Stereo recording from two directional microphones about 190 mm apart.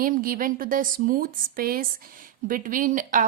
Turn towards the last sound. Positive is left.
turn(degrees=-45)  # may be behind; listen again after turning